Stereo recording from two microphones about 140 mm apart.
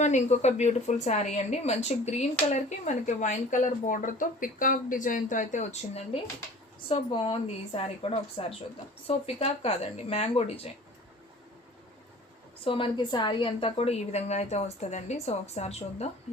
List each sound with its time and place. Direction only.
0.0 s speech: 55° left (ahead or behind)
6.8 s a woman's voice: 40° left (ahead or behind)
12.6 s a woman's voice: 40° left (ahead or behind)